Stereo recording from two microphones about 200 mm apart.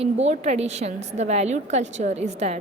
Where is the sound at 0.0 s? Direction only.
35° right (ahead or behind).